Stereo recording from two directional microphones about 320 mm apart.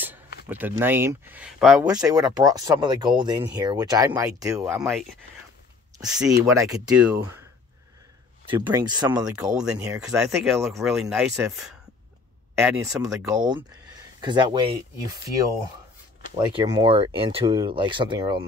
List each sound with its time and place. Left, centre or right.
0.5 s speech: centre
8.5 s speech: centre
16.3 s speech: centre